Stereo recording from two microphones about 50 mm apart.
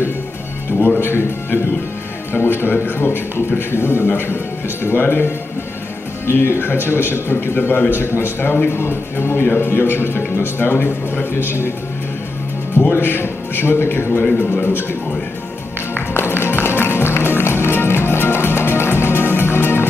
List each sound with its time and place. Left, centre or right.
0.7 s a man's voice: left
6.2 s a man's voice: left
8.0 s a man's voice: left
12.7 s a man's voice: left
14.5 s a man's voice: left
15.9 s music: left